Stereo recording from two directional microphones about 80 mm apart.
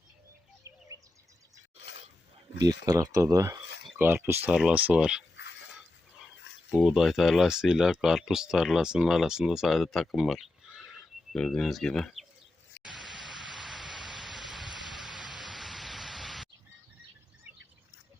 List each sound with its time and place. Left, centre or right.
2.6 s speech: right
3.9 s speech: right
4.5 s speech: centre
6.7 s speech: centre
12.8 s a sound: centre